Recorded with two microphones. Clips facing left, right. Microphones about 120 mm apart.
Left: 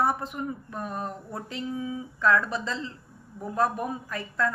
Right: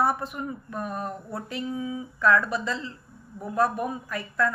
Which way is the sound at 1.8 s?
30° left (ahead or behind).